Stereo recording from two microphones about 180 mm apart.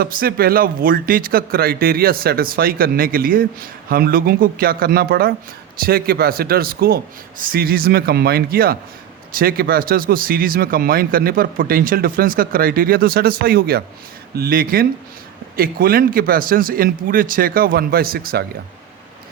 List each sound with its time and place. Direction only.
0.0 s speech: 55° right (ahead or behind)